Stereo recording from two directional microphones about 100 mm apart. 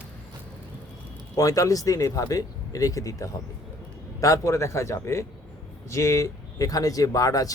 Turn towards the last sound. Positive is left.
turn(degrees=35)  # may be behind; listen again after turning